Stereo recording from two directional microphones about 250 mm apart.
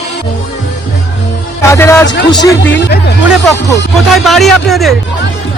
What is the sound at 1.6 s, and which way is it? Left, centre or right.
Speech, centre.